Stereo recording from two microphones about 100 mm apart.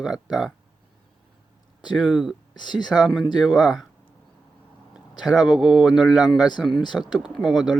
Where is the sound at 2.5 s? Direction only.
50° left (ahead or behind).